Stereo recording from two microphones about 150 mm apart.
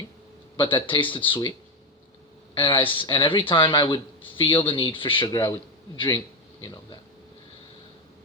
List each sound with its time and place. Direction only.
0.6 s speech: 35° left (ahead or behind)
2.6 s a man's voice: 35° left (ahead or behind)